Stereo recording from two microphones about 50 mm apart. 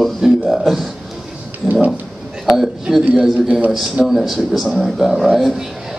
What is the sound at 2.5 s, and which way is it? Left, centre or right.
Speech, centre.